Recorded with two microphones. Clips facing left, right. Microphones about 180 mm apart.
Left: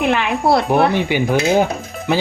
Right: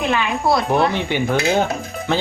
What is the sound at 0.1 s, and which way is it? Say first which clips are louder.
Speech: left 1 dB; 60° left (ahead or behind).